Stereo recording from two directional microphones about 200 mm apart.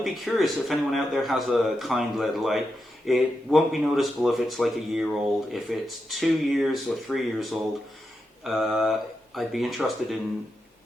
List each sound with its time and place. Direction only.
0.0 s speech: centre (ahead or behind)
8.4 s speech: centre (ahead or behind)